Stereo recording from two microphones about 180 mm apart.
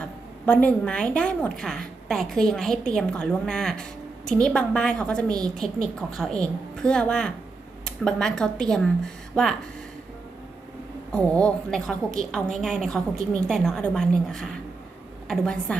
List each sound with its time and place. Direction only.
0.0 s a woman's voice: 10° left (ahead or behind)
11.1 s a woman's voice: 5° left (ahead or behind)